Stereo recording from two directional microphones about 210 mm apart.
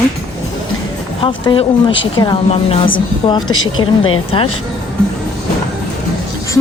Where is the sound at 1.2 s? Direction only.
25° left (ahead or behind).